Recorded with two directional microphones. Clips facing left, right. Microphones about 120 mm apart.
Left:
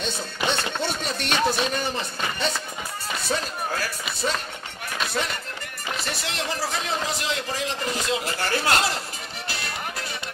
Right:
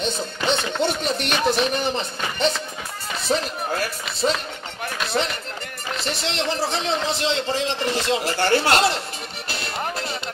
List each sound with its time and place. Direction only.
0.0 s music: 20° right (ahead or behind)
0.7 s a man's voice: 20° right (ahead or behind)
5.2 s speech: 35° right (ahead or behind)
6.0 s a man's voice: 25° right (ahead or behind)
9.5 s music: 25° right (ahead or behind)